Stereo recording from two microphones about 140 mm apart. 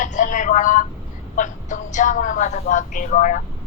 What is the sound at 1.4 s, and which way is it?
A woman's voice, 60° left (ahead or behind).